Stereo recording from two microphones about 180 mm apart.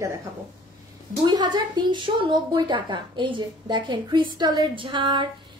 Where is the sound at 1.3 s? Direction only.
25° right (ahead or behind).